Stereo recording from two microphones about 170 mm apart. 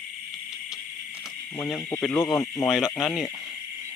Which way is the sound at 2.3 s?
15° left (ahead or behind).